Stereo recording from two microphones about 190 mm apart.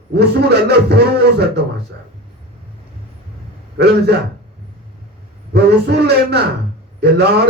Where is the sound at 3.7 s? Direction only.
60° right (ahead or behind).